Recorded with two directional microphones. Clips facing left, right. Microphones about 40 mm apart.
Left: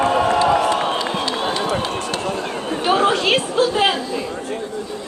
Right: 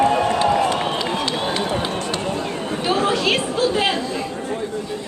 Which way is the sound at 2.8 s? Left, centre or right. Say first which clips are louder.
Left 3 dB; left.